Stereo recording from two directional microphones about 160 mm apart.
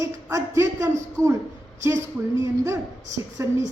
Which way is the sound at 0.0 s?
20° right (ahead or behind).